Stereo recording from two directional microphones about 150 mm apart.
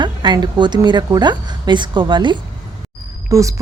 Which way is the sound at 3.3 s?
20° right (ahead or behind).